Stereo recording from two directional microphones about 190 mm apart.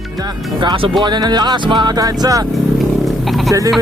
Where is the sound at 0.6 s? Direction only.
25° right (ahead or behind).